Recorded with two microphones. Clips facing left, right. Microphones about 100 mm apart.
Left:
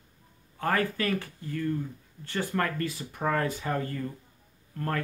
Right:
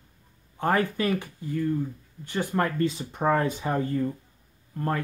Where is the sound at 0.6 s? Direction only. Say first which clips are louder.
Right 3 dB; 20° right (ahead or behind).